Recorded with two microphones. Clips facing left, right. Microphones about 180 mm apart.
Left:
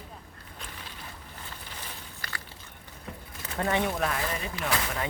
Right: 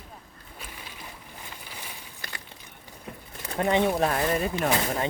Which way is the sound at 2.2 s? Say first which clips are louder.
Even; 20° right (ahead or behind).